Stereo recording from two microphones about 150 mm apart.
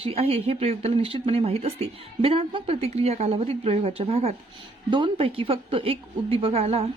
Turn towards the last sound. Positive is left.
turn(degrees=-40)  # may be behind; listen again after turning